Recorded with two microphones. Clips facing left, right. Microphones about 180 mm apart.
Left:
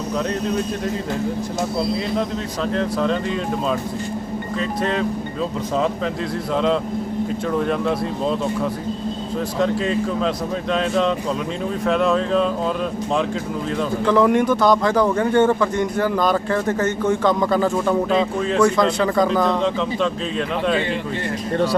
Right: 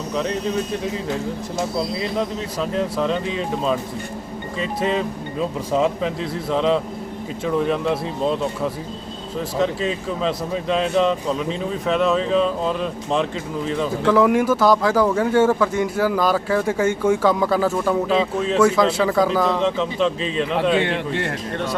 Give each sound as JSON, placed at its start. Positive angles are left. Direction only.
{"t": 0.2, "sound": "speech", "side_deg": 0}
{"t": 2.7, "sound": "speech", "side_deg": 0}
{"t": 21.5, "sound": "speech", "side_deg": 35}